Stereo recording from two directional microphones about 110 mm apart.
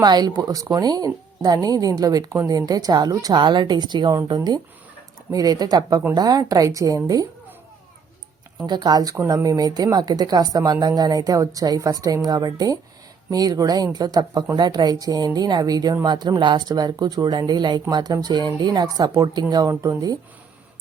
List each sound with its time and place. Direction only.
0.0 s speech: 40° right (ahead or behind)
8.5 s speech: 40° right (ahead or behind)